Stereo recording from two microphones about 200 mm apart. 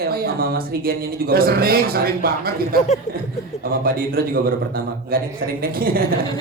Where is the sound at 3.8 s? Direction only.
45° right (ahead or behind).